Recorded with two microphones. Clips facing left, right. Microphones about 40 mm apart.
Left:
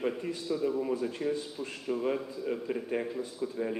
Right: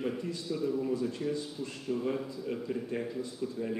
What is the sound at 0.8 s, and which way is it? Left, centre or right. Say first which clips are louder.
Speech: left 1 dB; left.